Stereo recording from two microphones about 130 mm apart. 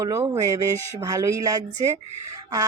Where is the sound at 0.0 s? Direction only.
25° right (ahead or behind).